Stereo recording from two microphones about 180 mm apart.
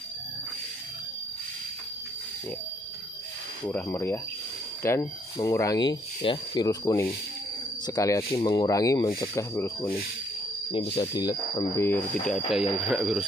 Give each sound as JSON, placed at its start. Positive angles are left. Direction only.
{"t": 3.6, "sound": "speech", "side_deg": 10}
{"t": 10.7, "sound": "speech", "side_deg": 25}
{"t": 12.4, "sound": "speech", "side_deg": 0}